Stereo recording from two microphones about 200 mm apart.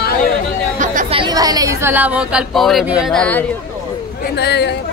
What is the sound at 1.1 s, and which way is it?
Speech, 20° right (ahead or behind).